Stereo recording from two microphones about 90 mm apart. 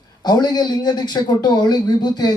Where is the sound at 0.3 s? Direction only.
50° left (ahead or behind).